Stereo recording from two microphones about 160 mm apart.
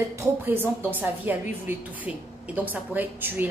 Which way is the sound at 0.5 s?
10° right (ahead or behind).